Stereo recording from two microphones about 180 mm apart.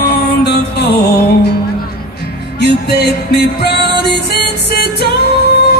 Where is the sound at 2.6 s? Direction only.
65° left (ahead or behind).